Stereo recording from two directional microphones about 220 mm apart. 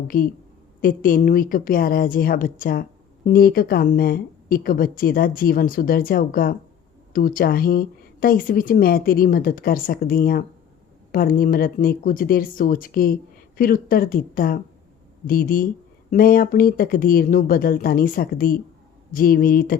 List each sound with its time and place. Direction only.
0.8 s speech: 40° left (ahead or behind)